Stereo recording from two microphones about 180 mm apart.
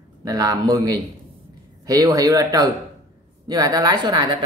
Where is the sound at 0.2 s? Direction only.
20° right (ahead or behind).